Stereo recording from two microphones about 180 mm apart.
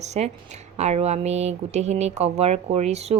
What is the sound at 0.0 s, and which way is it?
Speech, 40° right (ahead or behind).